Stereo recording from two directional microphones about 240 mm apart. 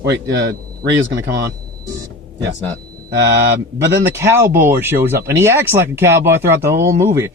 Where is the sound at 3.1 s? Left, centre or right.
Right.